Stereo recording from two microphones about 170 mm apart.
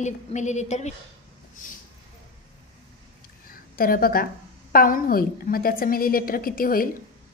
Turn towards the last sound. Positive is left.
turn(degrees=55)  # may be behind; listen again after turning